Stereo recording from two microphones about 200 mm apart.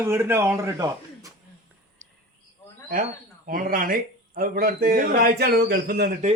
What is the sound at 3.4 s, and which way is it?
A man's voice, 45° right (ahead or behind).